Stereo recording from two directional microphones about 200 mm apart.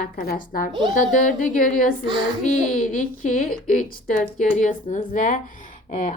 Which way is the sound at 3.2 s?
45° left (ahead or behind).